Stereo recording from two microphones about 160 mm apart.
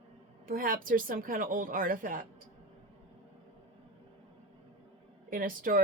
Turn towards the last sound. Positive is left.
turn(degrees=-60)  # may be behind; listen again after turning